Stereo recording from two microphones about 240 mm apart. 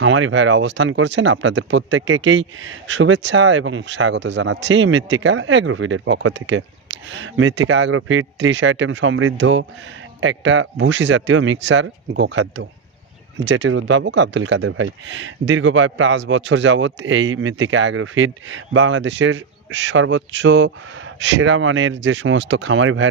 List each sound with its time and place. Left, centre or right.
0.0 s speech: right